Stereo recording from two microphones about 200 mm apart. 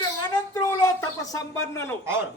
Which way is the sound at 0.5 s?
20° left (ahead or behind).